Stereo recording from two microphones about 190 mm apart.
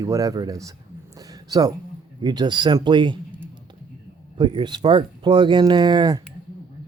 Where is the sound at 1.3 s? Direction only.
20° right (ahead or behind).